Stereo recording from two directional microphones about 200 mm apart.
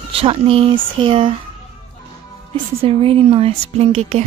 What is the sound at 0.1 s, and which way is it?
Speech, 30° right (ahead or behind).